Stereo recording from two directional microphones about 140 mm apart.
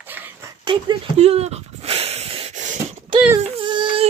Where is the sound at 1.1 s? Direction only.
50° right (ahead or behind).